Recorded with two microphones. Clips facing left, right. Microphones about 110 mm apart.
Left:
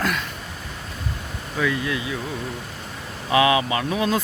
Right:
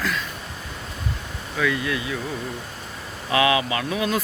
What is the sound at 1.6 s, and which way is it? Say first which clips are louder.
Speech: even; 25° left (ahead or behind).